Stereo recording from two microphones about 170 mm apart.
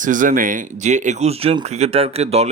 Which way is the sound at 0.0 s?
50° right (ahead or behind).